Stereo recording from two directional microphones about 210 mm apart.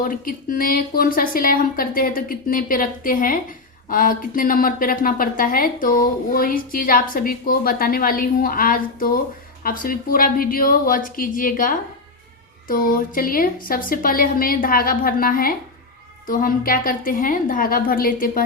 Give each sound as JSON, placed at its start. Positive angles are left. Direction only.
{"t": 0.0, "sound": "a woman's voice", "side_deg": 40}